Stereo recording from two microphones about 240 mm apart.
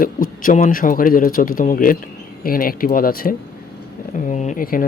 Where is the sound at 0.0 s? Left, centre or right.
Left.